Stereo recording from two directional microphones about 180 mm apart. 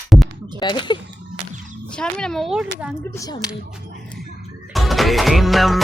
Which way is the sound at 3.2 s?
20° left (ahead or behind).